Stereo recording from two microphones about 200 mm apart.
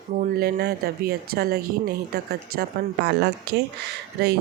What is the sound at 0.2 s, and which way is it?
Speech, 50° right (ahead or behind).